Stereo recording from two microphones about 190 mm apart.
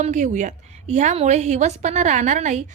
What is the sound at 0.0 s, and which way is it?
A woman's voice, 40° right (ahead or behind).